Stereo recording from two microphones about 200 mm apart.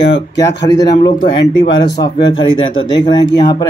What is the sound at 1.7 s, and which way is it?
Speech, 20° left (ahead or behind).